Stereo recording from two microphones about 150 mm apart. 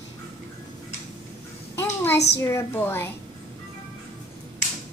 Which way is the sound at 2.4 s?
20° left (ahead or behind).